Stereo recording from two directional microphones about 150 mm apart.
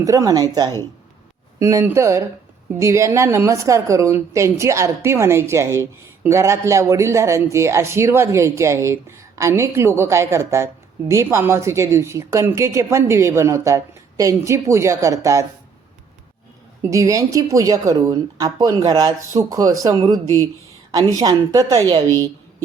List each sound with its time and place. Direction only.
0.0 s a woman's voice: 20° right (ahead or behind)
16.8 s a woman's voice: 20° right (ahead or behind)